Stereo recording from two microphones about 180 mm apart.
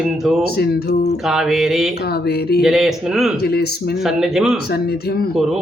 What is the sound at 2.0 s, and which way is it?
Speech, 60° left (ahead or behind).